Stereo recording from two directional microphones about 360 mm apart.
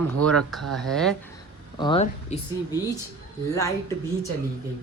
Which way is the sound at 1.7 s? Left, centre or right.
Centre.